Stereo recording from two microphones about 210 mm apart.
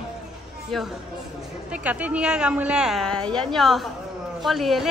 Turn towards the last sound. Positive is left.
turn(degrees=0)  # may be behind; listen again after turning